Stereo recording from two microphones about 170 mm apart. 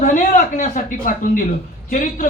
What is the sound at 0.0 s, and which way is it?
A man's voice, 50° left (ahead or behind).